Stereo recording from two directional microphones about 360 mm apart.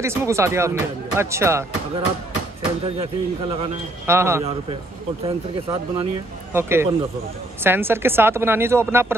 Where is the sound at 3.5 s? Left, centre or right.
Centre.